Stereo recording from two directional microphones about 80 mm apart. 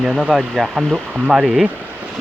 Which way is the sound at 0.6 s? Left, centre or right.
Centre.